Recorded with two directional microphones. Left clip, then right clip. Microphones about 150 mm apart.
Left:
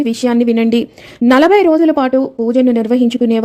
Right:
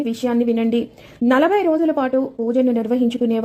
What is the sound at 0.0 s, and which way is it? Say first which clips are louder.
A woman's voice: left 6 dB; 25° left (ahead or behind).